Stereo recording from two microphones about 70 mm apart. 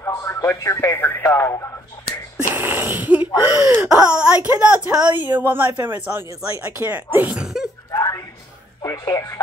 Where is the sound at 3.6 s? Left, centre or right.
Right.